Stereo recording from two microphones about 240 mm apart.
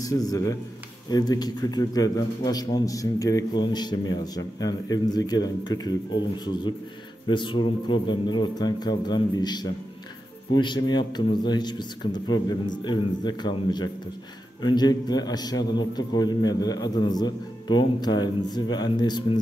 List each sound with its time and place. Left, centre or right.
0.0 s a man's voice: centre